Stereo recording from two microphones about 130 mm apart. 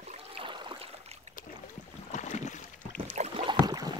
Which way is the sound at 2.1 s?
65° left (ahead or behind).